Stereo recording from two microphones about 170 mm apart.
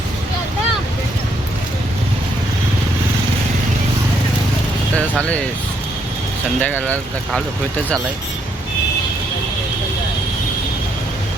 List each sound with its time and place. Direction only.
4.9 s speech: 5° left (ahead or behind)
6.6 s speech: 10° left (ahead or behind)